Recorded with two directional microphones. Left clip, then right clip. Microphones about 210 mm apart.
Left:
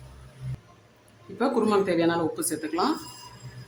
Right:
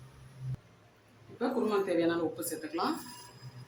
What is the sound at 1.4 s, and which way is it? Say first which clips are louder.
Speech: left 7 dB; 25° left (ahead or behind).